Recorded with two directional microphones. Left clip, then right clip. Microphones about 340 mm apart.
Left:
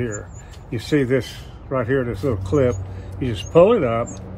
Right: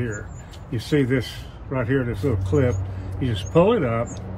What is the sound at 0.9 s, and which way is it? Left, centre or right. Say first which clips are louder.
A man's voice: left 3 dB; centre.